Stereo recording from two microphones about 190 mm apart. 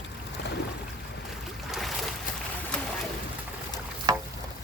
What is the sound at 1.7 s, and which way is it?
Boat, centre (ahead or behind).